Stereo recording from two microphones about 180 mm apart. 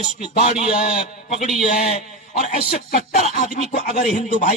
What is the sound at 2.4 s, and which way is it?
Speech, 40° left (ahead or behind).